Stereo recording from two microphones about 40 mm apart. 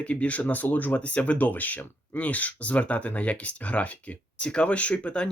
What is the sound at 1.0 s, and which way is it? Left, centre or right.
Speech, left.